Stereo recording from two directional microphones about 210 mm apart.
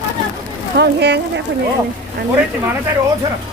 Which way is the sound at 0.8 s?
55° right (ahead or behind).